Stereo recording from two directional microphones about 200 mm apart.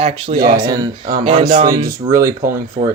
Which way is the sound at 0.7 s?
20° right (ahead or behind).